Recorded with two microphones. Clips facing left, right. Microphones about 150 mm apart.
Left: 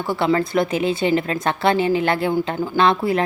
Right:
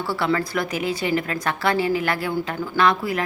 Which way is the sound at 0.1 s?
20° left (ahead or behind).